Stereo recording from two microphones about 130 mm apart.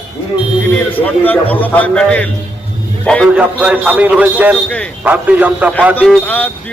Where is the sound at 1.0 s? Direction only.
15° left (ahead or behind).